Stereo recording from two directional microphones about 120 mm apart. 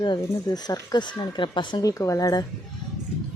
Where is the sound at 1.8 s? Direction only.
30° left (ahead or behind).